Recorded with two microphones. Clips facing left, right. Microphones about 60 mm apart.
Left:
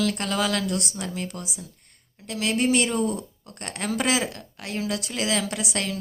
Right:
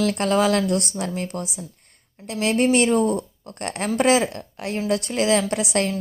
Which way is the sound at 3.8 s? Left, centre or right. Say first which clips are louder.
Right 6 dB; right.